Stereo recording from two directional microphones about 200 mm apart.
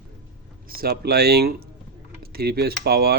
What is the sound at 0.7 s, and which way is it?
Speech, 50° right (ahead or behind).